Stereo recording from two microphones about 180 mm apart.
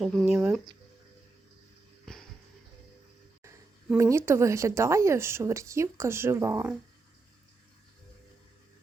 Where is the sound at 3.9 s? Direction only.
15° right (ahead or behind).